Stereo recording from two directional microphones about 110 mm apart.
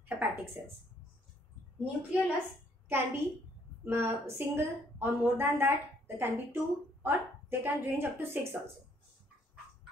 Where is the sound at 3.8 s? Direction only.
20° right (ahead or behind).